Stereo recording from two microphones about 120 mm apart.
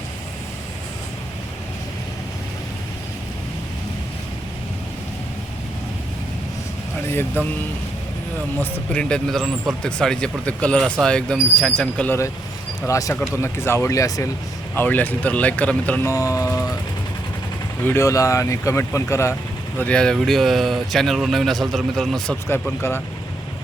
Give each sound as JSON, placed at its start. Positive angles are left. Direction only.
{"t": 7.1, "sound": "speech", "side_deg": 20}
{"t": 8.7, "sound": "speech", "side_deg": 10}
{"t": 12.8, "sound": "speech", "side_deg": 25}
{"t": 14.8, "sound": "speech", "side_deg": 15}
{"t": 16.0, "sound": "speech", "side_deg": 30}
{"t": 17.8, "sound": "speech", "side_deg": 20}
{"t": 19.8, "sound": "speech", "side_deg": 10}